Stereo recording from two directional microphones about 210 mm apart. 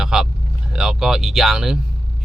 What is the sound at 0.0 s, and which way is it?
A man's voice, 5° right (ahead or behind).